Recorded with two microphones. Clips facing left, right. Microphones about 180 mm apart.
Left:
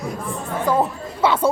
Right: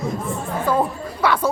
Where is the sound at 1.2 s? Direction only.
25° left (ahead or behind).